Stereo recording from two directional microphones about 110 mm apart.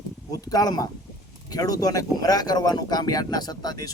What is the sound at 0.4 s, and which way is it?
Speech, 35° left (ahead or behind).